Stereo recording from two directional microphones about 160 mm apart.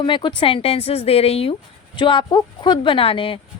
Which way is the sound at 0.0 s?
30° left (ahead or behind).